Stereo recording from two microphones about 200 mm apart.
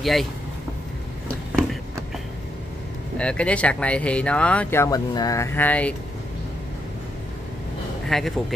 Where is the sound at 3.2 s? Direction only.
5° left (ahead or behind).